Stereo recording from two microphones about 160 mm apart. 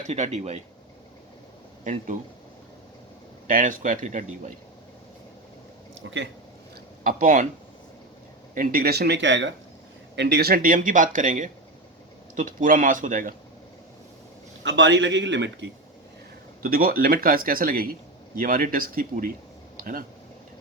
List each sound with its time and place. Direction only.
0.1 s speech: 45° right (ahead or behind)
1.8 s speech: 50° right (ahead or behind)
3.4 s speech: 55° right (ahead or behind)
7.0 s speech: 60° right (ahead or behind)
8.5 s speech: 65° right (ahead or behind)
15.1 s speech: 90° right
16.6 s speech: 65° right (ahead or behind)